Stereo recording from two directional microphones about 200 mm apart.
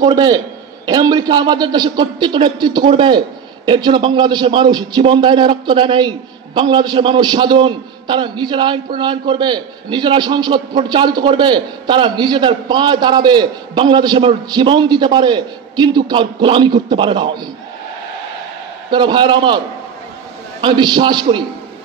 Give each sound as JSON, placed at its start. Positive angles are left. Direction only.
{"t": 0.0, "sound": "a man's voice", "side_deg": -20}
{"t": 18.9, "sound": "a man's voice", "side_deg": -20}
{"t": 20.6, "sound": "a man's voice", "side_deg": -20}